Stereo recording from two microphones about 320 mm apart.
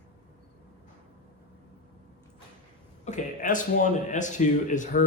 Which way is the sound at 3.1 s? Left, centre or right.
Left.